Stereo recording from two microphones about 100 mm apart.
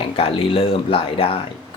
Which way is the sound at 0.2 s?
65° left (ahead or behind).